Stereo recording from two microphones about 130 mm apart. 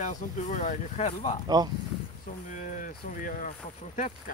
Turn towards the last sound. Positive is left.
turn(degrees=80)